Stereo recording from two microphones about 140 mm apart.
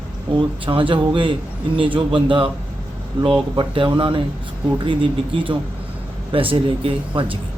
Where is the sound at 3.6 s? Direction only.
35° right (ahead or behind).